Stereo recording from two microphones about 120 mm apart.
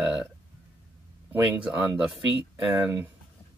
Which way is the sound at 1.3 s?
10° right (ahead or behind).